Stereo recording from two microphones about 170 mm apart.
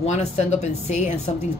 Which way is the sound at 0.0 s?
40° left (ahead or behind).